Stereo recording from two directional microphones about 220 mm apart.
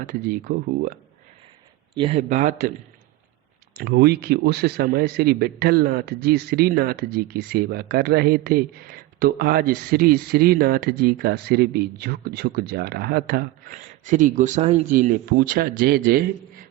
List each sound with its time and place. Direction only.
0.1 s speech: 40° right (ahead or behind)
2.0 s speech: 25° right (ahead or behind)
3.8 s speech: 45° right (ahead or behind)